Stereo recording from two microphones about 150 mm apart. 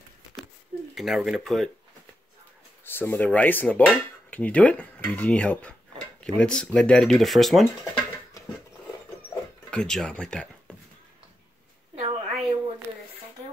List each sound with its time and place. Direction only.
0.9 s speech: centre (ahead or behind)
2.8 s cutlery: 15° left (ahead or behind)
9.7 s speech: 5° left (ahead or behind)
12.0 s a sound: 45° right (ahead or behind)